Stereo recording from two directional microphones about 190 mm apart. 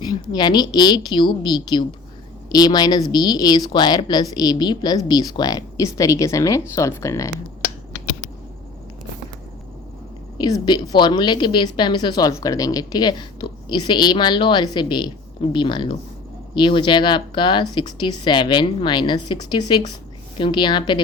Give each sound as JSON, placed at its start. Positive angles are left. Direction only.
{"t": 0.0, "sound": "a woman's voice", "side_deg": 20}
{"t": 10.3, "sound": "a woman's voice", "side_deg": 20}